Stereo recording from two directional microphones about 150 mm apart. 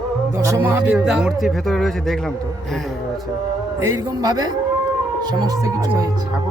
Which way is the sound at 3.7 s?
25° right (ahead or behind).